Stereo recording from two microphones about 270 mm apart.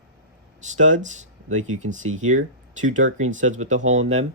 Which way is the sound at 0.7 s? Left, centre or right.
Right.